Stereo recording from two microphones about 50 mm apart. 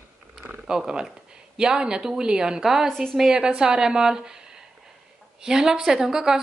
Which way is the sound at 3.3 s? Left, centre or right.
Centre.